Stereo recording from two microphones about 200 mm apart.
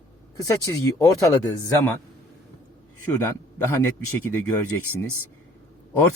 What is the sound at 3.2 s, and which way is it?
A man's voice, 15° left (ahead or behind).